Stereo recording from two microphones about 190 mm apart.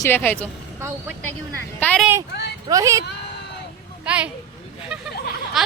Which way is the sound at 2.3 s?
60° left (ahead or behind).